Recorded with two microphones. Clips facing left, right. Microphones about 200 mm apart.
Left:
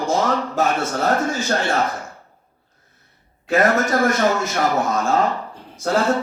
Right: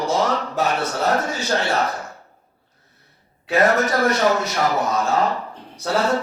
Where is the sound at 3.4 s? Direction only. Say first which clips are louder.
Even; 50° left (ahead or behind).